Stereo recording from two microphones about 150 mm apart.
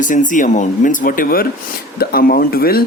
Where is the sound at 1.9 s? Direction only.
90° left.